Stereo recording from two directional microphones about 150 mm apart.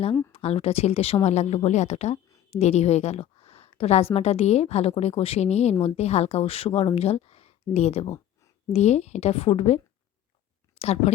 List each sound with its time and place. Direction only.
0.3 s a woman's voice: 40° left (ahead or behind)